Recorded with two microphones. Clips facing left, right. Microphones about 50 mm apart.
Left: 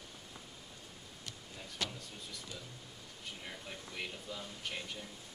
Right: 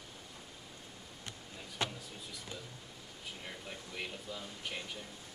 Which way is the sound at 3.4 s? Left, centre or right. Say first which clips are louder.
Right 1 dB; centre.